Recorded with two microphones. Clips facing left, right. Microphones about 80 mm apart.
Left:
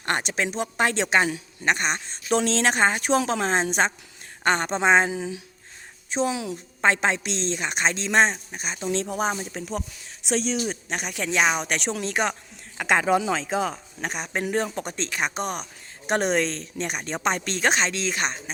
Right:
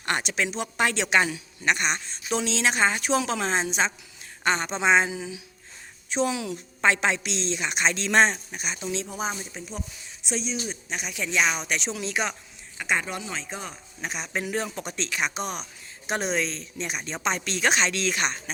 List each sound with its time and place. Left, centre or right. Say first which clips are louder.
0.0 s a woman's voice: left 1 dB; left
6.1 s a woman's voice: left 1 dB; left
8.9 s speech: left 6 dB; left
10.2 s speech: left 6 dB; left
12.7 s a man's voice: left 7 dB; left
14.1 s a woman's voice: left 3 dB; left